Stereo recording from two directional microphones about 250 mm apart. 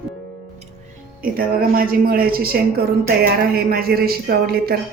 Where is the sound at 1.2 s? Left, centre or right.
Right.